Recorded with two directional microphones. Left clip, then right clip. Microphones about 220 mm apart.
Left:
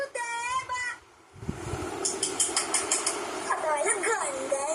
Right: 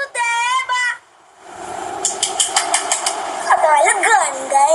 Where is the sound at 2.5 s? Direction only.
45° right (ahead or behind).